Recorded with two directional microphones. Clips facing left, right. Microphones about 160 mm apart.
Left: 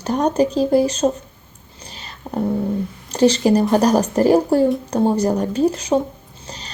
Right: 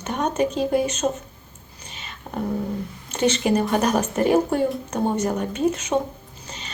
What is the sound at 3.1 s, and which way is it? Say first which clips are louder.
Speech: left 6 dB; 35° left (ahead or behind).